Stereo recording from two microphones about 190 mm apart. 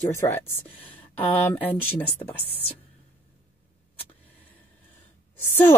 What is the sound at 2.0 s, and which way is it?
Speech, 30° left (ahead or behind).